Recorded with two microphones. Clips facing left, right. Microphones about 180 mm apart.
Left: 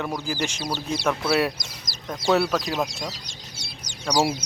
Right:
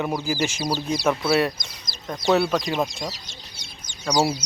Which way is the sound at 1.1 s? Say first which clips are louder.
Right 2 dB; centre (ahead or behind).